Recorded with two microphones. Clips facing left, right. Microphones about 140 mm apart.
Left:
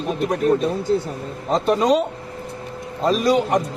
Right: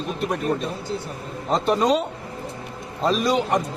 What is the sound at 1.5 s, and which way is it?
Speech, centre (ahead or behind).